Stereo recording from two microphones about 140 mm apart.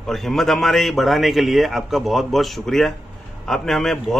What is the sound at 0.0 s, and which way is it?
Speech, centre (ahead or behind).